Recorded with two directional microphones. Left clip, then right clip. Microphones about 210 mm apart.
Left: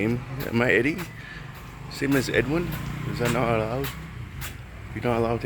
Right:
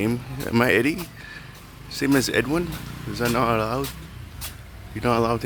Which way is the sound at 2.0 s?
30° right (ahead or behind).